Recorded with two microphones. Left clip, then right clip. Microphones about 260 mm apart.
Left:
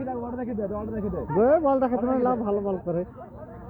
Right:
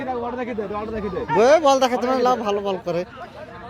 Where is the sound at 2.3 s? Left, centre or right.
Centre.